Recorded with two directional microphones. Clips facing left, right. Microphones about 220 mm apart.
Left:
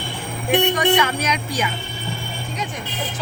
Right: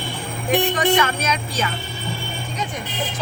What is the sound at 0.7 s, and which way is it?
Speech, 10° left (ahead or behind).